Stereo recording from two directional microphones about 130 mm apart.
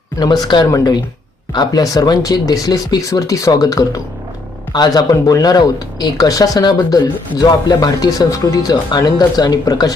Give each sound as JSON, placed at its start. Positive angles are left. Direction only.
{"t": 0.2, "sound": "speech", "side_deg": 35}